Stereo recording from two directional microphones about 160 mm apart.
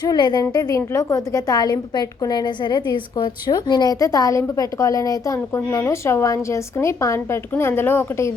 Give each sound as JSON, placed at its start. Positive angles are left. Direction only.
{"t": 0.0, "sound": "a woman's voice", "side_deg": 25}